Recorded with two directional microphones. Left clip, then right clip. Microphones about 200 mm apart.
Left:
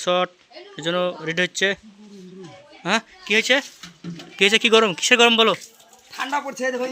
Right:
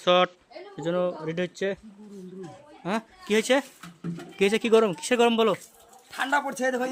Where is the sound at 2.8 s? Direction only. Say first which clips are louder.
Left 8 dB; centre (ahead or behind).